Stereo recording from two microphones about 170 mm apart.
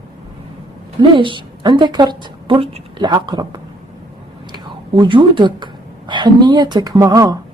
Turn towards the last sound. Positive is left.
turn(degrees=-20)  # may be behind; listen again after turning